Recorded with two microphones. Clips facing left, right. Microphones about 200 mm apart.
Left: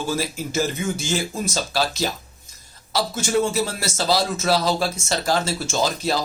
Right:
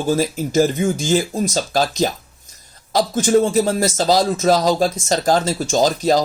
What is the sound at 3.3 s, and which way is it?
Speech, 45° right (ahead or behind).